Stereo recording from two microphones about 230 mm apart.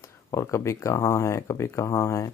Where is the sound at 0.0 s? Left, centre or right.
Centre.